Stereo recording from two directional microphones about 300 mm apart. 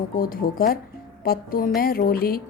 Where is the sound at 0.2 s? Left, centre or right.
Left.